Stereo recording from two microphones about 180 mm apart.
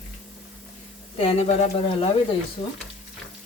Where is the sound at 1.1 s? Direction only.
35° left (ahead or behind).